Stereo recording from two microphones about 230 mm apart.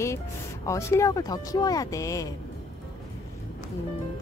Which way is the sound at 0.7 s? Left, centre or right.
Centre.